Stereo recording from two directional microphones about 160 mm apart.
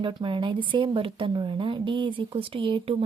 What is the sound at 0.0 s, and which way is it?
Speech, 30° right (ahead or behind).